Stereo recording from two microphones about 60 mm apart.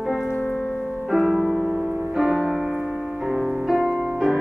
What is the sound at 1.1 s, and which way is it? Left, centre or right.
Music, centre.